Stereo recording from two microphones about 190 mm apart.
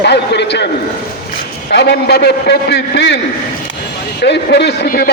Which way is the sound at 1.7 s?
60° left (ahead or behind).